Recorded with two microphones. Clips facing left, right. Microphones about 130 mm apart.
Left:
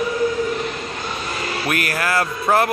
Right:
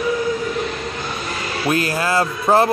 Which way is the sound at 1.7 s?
25° right (ahead or behind).